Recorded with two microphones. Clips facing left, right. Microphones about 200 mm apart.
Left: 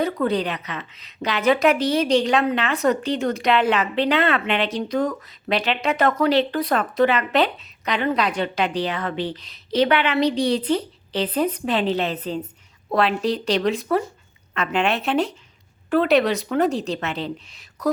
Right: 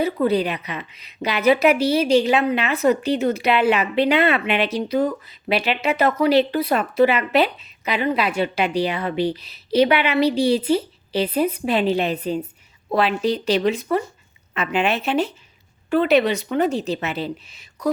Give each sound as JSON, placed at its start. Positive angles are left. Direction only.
{"t": 0.0, "sound": "a woman's voice", "side_deg": -10}